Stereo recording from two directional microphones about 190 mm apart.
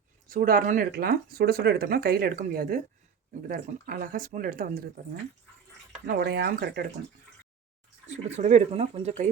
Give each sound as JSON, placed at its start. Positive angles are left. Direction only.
{"t": 0.3, "sound": "speech", "side_deg": -50}
{"t": 6.1, "sound": "speech", "side_deg": -60}
{"t": 8.0, "sound": "speech", "side_deg": -35}